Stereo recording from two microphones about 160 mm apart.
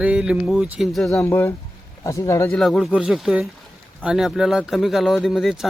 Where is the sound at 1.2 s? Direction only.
15° left (ahead or behind).